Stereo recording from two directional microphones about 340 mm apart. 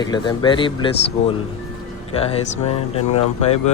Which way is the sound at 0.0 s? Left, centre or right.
Centre.